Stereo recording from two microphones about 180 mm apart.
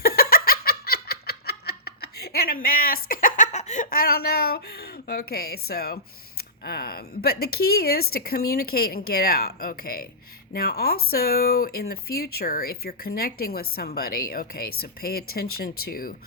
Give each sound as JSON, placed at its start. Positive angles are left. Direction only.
{"t": 0.0, "sound": "giggle", "side_deg": 55}
{"t": 10.5, "sound": "speech", "side_deg": 60}